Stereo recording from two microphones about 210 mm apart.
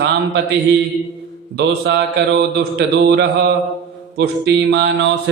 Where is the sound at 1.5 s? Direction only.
50° right (ahead or behind).